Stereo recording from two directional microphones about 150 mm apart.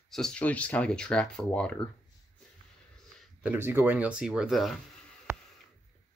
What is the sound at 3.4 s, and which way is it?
Speech, 15° right (ahead or behind).